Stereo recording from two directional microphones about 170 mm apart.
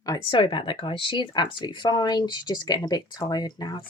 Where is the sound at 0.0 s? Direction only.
25° left (ahead or behind).